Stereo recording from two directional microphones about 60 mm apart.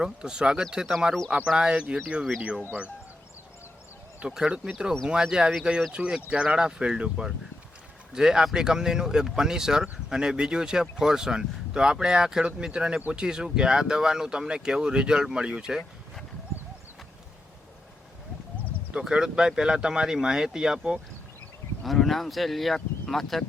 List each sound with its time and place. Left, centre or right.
0.0 s speech: centre
4.3 s speech: centre
18.9 s speech: centre
21.8 s speech: centre